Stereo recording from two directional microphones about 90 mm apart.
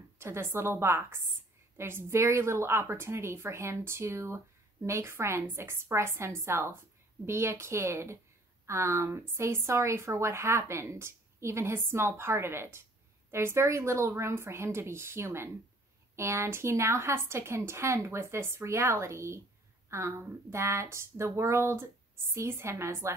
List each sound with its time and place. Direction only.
0.2 s a woman's voice: 30° right (ahead or behind)